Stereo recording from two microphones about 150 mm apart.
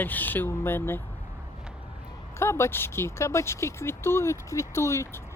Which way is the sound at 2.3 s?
15° left (ahead or behind).